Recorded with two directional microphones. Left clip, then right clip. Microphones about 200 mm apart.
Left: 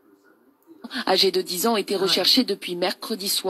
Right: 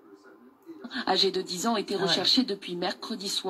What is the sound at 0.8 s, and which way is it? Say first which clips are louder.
Speech: left 5 dB; 40° left (ahead or behind).